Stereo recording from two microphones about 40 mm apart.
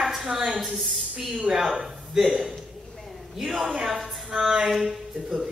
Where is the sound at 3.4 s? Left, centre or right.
Centre.